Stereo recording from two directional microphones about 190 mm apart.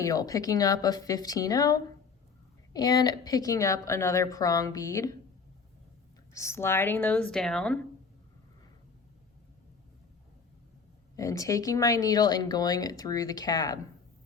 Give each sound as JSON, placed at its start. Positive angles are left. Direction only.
{"t": 0.0, "sound": "speech", "side_deg": 20}
{"t": 6.3, "sound": "speech", "side_deg": 15}
{"t": 11.2, "sound": "speech", "side_deg": 15}